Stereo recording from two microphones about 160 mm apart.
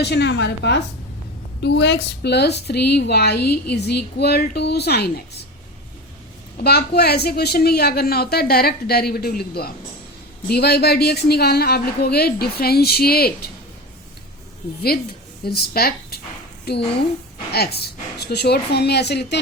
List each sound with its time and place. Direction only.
0.0 s a woman's voice: 90° left
6.6 s a woman's voice: 90° left; by 9.7 s 75° left (ahead or behind)
10.5 s a woman's voice: 90° left
15.4 s a woman's voice: 80° left
16.7 s a woman's voice: 90° left